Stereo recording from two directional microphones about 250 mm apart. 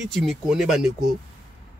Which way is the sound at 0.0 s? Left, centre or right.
Centre.